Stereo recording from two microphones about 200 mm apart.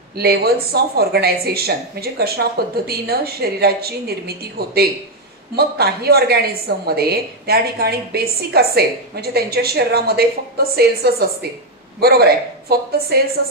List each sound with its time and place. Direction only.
0.2 s a woman's voice: 50° right (ahead or behind)